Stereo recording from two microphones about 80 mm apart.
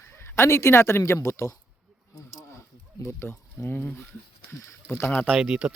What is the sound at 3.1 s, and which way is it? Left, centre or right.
A man's voice, left.